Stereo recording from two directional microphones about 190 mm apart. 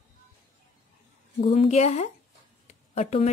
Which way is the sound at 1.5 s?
35° left (ahead or behind).